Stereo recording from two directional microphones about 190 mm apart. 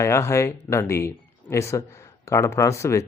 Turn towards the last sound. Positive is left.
turn(degrees=15)  # may be behind; listen again after turning